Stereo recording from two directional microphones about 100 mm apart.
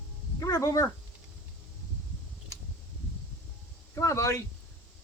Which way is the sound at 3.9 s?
30° left (ahead or behind).